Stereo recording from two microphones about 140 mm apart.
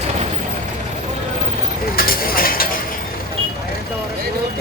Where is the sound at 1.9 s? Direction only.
90° left.